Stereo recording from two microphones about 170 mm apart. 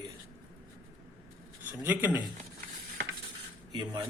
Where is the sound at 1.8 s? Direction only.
10° right (ahead or behind).